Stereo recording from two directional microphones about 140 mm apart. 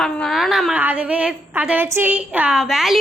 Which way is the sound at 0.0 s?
Centre (ahead or behind).